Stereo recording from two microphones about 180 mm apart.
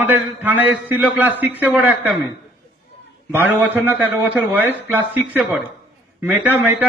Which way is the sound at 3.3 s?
10° right (ahead or behind).